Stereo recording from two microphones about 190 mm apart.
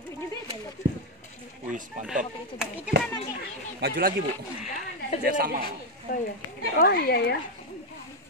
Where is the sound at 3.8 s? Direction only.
55° right (ahead or behind).